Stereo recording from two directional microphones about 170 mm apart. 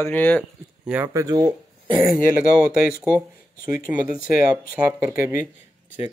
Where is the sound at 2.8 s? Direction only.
5° right (ahead or behind).